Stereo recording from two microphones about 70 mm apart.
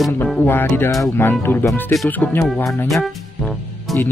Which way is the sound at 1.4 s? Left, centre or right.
Left.